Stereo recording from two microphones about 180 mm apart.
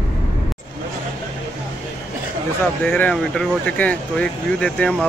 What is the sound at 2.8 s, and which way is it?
Speech, 10° left (ahead or behind).